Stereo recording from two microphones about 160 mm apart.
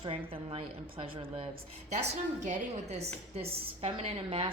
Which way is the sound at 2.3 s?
50° right (ahead or behind).